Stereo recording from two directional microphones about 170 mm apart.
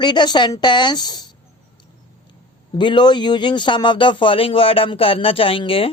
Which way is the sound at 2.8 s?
25° left (ahead or behind).